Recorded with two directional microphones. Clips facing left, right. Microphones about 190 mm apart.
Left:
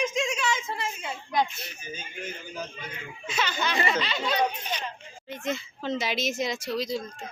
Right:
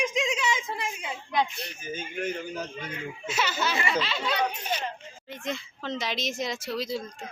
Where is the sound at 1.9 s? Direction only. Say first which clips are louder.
Right 8 dB; 60° right (ahead or behind).